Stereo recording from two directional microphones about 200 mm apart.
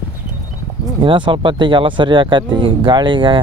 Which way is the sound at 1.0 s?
25° right (ahead or behind).